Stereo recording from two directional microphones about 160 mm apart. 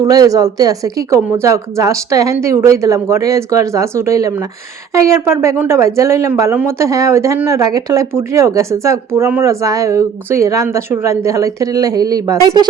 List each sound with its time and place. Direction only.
0.0 s speech: 25° right (ahead or behind)